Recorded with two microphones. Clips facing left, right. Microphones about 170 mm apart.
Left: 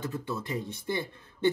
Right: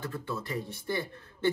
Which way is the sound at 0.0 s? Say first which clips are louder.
Left 2 dB; 20° left (ahead or behind).